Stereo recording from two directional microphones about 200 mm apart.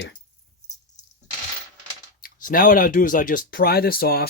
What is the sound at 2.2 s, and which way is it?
Speech, 45° left (ahead or behind).